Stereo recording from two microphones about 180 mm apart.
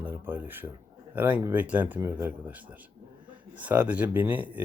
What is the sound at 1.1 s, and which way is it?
Speech, 10° right (ahead or behind).